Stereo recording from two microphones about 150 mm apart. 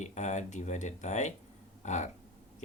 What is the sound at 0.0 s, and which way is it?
Speech, 50° left (ahead or behind).